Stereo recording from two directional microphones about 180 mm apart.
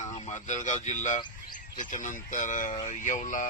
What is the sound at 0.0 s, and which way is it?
Speech, 40° left (ahead or behind).